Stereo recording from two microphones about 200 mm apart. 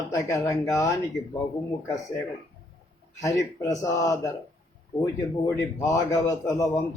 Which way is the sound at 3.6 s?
15° left (ahead or behind).